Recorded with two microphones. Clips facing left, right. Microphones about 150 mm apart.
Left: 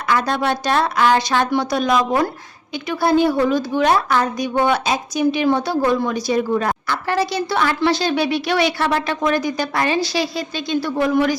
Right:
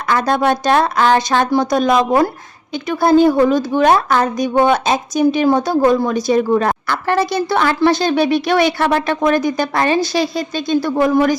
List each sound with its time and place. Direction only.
0.1 s a woman's voice: 45° right (ahead or behind)